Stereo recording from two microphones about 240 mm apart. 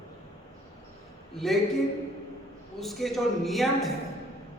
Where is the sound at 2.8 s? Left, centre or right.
Centre.